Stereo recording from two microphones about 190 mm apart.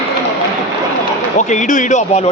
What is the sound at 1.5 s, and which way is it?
Speech, 40° left (ahead or behind).